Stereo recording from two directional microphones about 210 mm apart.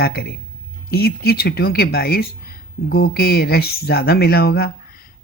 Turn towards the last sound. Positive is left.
turn(degrees=50)  # may be behind; listen again after turning